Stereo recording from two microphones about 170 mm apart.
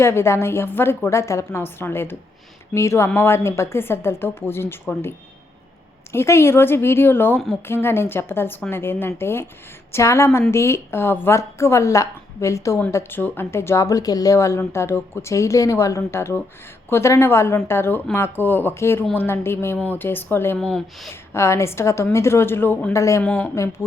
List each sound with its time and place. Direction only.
0.0 s a woman's voice: 15° left (ahead or behind)
21.3 s a woman's voice: 15° left (ahead or behind)